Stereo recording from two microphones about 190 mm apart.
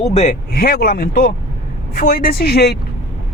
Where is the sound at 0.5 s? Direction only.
55° left (ahead or behind).